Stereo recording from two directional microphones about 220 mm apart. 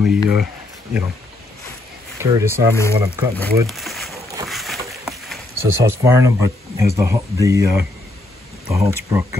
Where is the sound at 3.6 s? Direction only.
Centre (ahead or behind).